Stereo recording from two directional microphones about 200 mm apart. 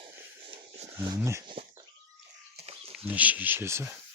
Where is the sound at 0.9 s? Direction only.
15° right (ahead or behind).